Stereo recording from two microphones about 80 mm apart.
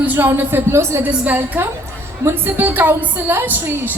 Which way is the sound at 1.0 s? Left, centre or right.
Right.